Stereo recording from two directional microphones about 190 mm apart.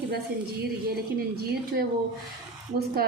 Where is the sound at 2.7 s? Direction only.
55° right (ahead or behind).